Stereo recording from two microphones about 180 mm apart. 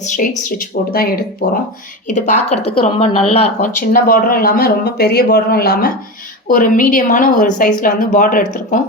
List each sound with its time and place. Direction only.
0.0 s speech: 45° left (ahead or behind); by 1.6 s 65° left (ahead or behind)
2.0 s speech: 45° left (ahead or behind)
3.9 s speech: 55° left (ahead or behind)
6.5 s speech: 50° left (ahead or behind)